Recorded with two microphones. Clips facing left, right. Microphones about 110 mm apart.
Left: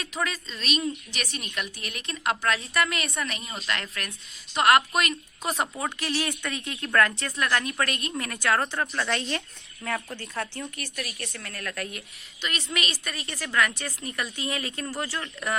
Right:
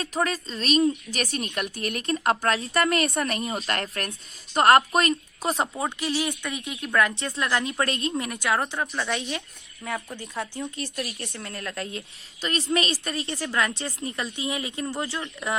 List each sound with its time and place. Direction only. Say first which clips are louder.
0.0 s a woman's voice: right 4 dB; 35° right (ahead or behind); by 8.6 s 15° right (ahead or behind)
8.9 s speech: even; 5° right (ahead or behind)
10.8 s a woman's voice: right 4 dB; 30° right (ahead or behind)